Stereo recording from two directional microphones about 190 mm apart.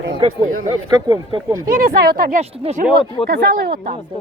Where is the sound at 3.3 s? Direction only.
55° right (ahead or behind).